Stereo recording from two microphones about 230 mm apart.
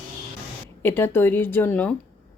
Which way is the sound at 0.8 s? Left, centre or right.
Centre.